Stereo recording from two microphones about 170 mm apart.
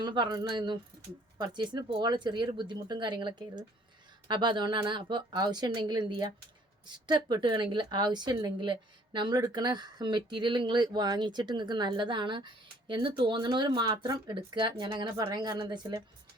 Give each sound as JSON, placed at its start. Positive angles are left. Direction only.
{"t": 0.0, "sound": "speech", "side_deg": -25}